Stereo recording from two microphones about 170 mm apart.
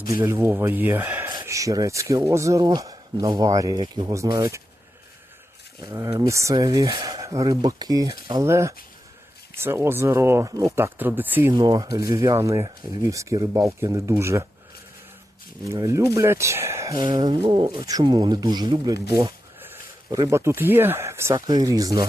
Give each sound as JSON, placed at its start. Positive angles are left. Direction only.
{"t": 0.1, "sound": "speech", "side_deg": -15}
{"t": 5.8, "sound": "speech", "side_deg": -15}
{"t": 11.6, "sound": "speech", "side_deg": -30}
{"t": 15.7, "sound": "speech", "side_deg": -15}
{"t": 16.9, "sound": "speech", "side_deg": -30}
{"t": 19.7, "sound": "speech", "side_deg": -20}